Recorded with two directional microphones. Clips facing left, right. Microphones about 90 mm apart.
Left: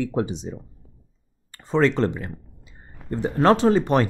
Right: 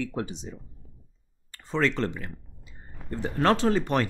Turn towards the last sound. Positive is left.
turn(degrees=20)  # may be behind; listen again after turning